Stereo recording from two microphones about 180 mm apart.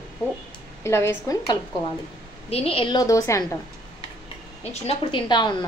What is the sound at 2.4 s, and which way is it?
A woman's voice, 35° left (ahead or behind).